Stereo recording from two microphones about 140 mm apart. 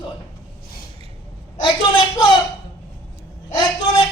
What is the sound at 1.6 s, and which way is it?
Speech, 30° left (ahead or behind).